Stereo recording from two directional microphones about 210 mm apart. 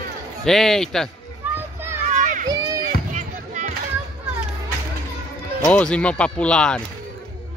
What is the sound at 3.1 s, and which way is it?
Music, 35° right (ahead or behind).